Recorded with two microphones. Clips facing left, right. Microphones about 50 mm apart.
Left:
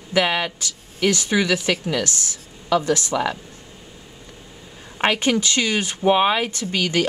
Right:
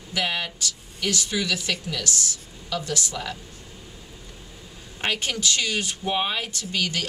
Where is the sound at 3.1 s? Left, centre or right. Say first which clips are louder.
Left 10 dB; left.